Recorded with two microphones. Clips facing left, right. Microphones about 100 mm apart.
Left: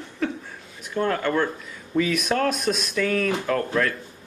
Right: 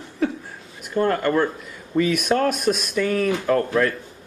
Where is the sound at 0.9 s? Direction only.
5° right (ahead or behind).